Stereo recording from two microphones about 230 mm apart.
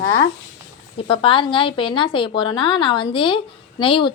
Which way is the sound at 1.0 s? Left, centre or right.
Left.